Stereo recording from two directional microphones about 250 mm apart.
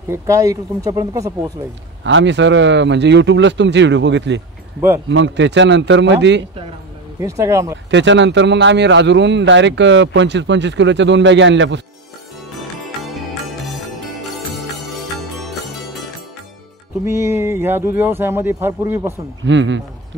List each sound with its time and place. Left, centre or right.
0.1 s speech: centre
2.0 s speech: right
7.2 s speech: centre
7.9 s speech: right
14.3 s jingle bell: centre
17.0 s speech: centre
19.4 s speech: right